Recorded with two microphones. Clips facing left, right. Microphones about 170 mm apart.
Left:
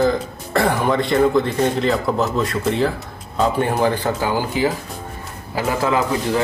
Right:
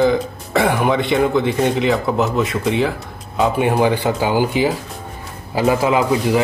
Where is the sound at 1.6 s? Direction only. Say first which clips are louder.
Right 1 dB; 10° right (ahead or behind).